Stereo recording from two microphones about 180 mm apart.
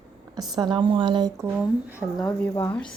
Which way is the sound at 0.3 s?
25° right (ahead or behind).